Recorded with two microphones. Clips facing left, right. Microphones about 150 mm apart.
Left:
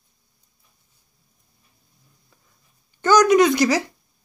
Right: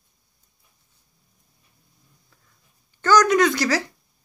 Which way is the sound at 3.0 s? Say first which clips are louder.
Left 3 dB; 20° left (ahead or behind).